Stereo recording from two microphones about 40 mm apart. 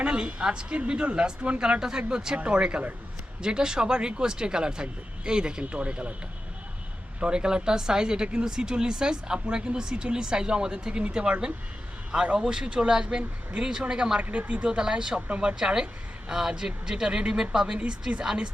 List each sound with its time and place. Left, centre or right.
0.0 s speech: right
7.2 s speech: right
14.2 s speech: right